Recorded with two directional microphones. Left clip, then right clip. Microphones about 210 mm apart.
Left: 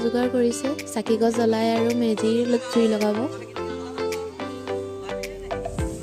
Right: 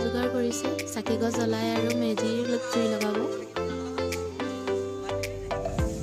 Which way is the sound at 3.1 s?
Centre (ahead or behind).